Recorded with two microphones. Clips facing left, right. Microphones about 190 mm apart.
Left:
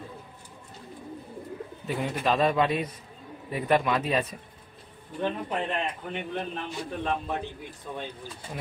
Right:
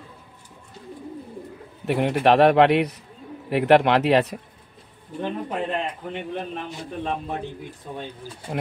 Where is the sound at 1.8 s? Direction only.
70° right (ahead or behind).